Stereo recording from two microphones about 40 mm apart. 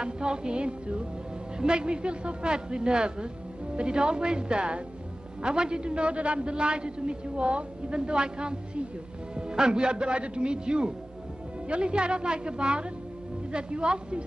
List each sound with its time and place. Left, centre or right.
0.0 s music: right
1.6 s a man's voice: right